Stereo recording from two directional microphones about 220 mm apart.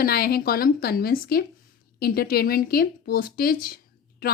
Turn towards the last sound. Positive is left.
turn(degrees=40)  # may be behind; listen again after turning